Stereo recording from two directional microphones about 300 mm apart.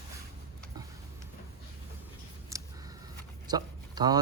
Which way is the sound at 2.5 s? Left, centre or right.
Centre.